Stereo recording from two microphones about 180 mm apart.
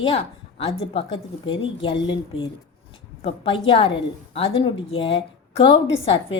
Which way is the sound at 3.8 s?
35° left (ahead or behind).